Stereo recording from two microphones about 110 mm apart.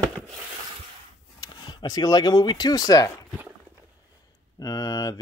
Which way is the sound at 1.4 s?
40° left (ahead or behind).